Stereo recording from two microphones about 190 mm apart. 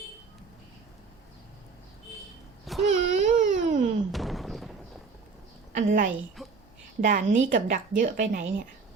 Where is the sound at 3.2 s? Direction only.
40° right (ahead or behind).